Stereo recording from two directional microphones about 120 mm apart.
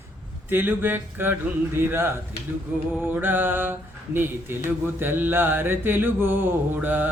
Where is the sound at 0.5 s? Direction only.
15° right (ahead or behind).